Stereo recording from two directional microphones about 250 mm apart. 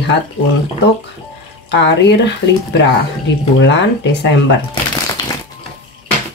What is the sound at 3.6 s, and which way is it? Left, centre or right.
Speech, left.